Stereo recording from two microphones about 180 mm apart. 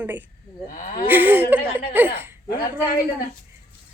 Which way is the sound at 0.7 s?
45° left (ahead or behind).